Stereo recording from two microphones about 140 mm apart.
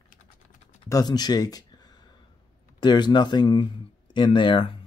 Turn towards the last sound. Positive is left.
turn(degrees=35)  # may be behind; listen again after turning